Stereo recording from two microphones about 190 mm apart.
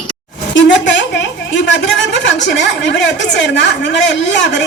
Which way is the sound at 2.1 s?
70° left (ahead or behind).